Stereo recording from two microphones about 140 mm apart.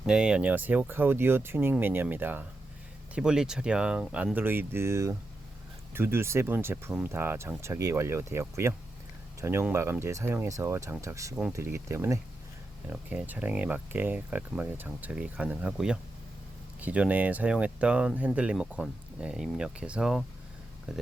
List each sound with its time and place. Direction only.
0.0 s speech: 5° right (ahead or behind)
12.9 s speech: 10° right (ahead or behind)